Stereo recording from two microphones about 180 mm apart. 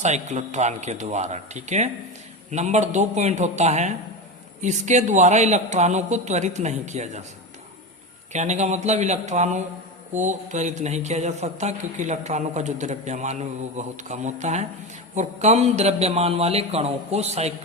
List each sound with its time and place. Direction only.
0.0 s a man's voice: 40° right (ahead or behind)
8.3 s a man's voice: 40° right (ahead or behind)